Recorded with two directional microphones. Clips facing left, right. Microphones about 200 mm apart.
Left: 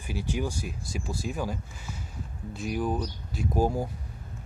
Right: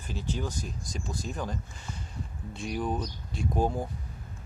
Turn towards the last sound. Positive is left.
turn(degrees=5)  # may be behind; listen again after turning